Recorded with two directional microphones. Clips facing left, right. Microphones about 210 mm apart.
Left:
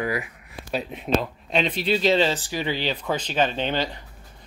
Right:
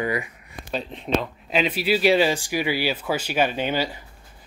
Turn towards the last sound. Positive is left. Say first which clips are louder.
# right 1 dB
turn(degrees=-10)  # may be behind; listen again after turning